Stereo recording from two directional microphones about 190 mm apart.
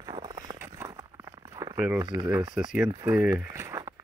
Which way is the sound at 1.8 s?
5° right (ahead or behind).